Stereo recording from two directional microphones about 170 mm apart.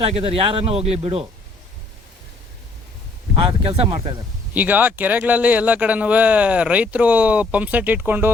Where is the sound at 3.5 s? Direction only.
30° right (ahead or behind).